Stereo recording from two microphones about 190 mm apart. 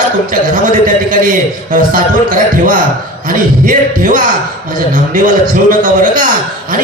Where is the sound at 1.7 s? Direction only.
45° right (ahead or behind).